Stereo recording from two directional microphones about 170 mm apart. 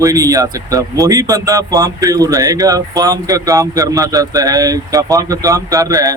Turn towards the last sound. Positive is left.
turn(degrees=-20)  # may be behind; listen again after turning